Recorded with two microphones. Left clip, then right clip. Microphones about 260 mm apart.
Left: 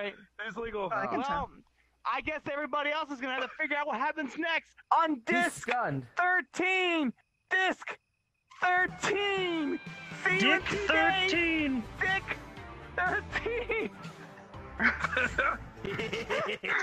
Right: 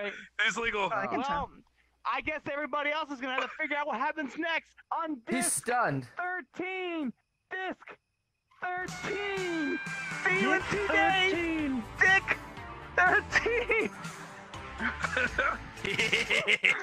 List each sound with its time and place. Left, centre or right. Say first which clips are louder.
0.2 s a man's voice: right 9 dB; right
0.8 s a man's voice: right 1 dB; centre
4.8 s speech: left 7 dB; centre
5.7 s speech: right 2 dB; right
6.1 s speech: left 7 dB; centre
9.8 s speech: right 7 dB; right
10.2 s a man's voice: left 1 dB; centre
14.5 s music: right 6 dB; right
15.0 s a man's voice: even; centre
15.7 s a sound: right 7 dB; right